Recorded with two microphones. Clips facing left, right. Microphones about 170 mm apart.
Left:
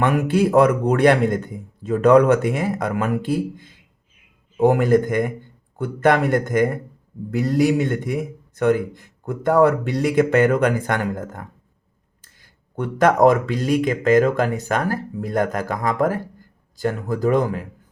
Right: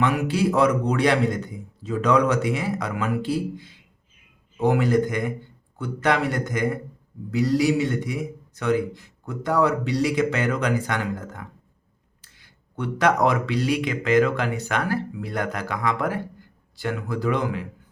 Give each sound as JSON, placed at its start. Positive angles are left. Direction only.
{"t": 0.0, "sound": "a man's voice", "side_deg": 50}